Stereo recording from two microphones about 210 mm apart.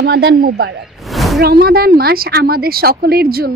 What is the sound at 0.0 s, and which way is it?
Speech, 50° right (ahead or behind).